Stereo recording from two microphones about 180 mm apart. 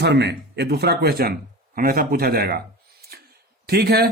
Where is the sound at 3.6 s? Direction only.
60° right (ahead or behind).